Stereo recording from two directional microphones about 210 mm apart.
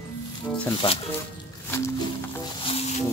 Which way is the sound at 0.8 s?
25° left (ahead or behind).